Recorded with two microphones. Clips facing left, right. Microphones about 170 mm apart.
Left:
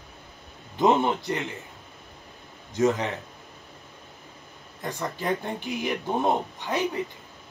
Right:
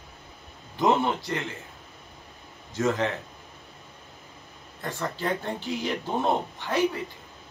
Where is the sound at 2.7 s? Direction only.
20° left (ahead or behind).